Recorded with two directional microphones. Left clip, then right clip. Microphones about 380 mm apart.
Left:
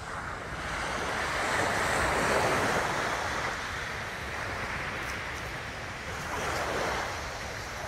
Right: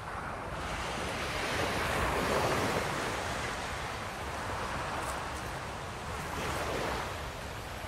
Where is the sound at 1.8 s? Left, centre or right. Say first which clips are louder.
Left 4 dB; left.